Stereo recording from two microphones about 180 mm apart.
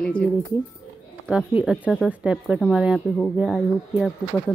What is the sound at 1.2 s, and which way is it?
A woman's voice, 5° right (ahead or behind).